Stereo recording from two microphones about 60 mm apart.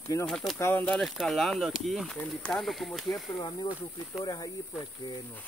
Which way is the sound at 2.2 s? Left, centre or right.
Left.